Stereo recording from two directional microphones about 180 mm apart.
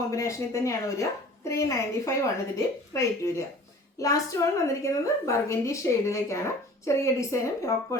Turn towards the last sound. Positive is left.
turn(degrees=15)  # may be behind; listen again after turning